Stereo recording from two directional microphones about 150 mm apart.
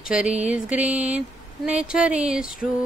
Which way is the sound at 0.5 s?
10° right (ahead or behind).